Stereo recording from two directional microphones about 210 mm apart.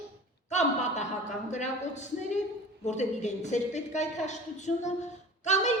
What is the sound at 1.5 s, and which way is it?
A woman's voice, 35° left (ahead or behind).